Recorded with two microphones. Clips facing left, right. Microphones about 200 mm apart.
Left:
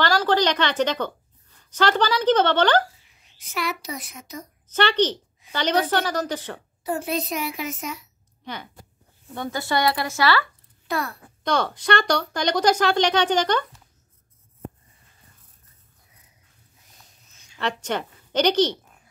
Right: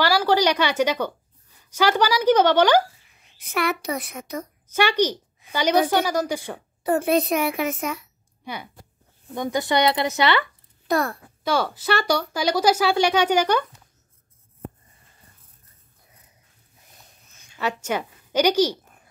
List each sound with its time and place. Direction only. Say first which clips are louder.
0.0 s a woman's voice: right 1 dB; 10° right (ahead or behind)
3.3 s a woman's voice: right 4 dB; 60° right (ahead or behind)
4.6 s speech: even; 10° right (ahead or behind)
6.8 s a woman's voice: right 6 dB; 60° right (ahead or behind)
9.3 s speech: right 3 dB; 15° right (ahead or behind)
10.9 s a child's voice: right 5 dB; 45° right (ahead or behind)
11.4 s speech: even; 5° right (ahead or behind)
17.6 s a woman's voice: right 1 dB; 10° right (ahead or behind)